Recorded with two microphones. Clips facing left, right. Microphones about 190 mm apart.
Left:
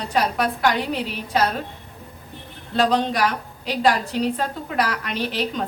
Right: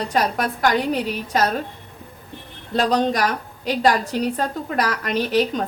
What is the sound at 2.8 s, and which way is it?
A woman's voice, 45° right (ahead or behind).